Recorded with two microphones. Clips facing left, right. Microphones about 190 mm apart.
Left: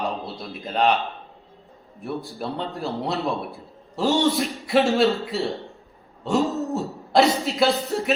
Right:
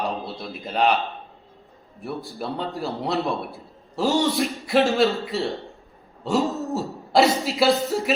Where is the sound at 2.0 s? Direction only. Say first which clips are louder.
Left 1 dB; centre (ahead or behind).